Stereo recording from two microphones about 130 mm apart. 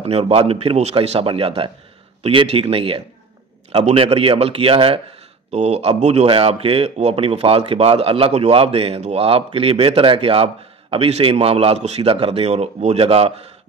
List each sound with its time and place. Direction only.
0.0 s speech: 50° right (ahead or behind)
5.5 s speech: 60° right (ahead or behind)